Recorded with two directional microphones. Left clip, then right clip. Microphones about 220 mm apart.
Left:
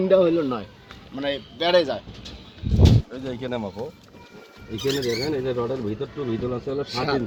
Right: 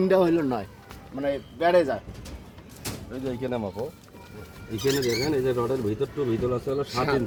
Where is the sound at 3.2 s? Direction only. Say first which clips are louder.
Even; 20° left (ahead or behind).